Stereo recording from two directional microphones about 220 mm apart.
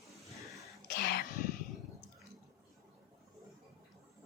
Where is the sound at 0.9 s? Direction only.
45° left (ahead or behind).